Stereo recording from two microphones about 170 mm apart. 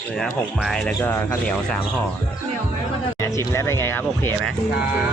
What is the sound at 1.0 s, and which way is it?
Speech, 15° left (ahead or behind).